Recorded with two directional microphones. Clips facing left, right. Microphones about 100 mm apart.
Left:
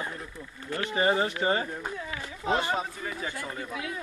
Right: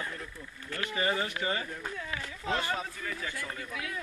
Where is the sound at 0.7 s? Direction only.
25° left (ahead or behind).